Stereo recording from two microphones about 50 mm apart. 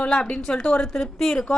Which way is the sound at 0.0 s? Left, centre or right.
Centre.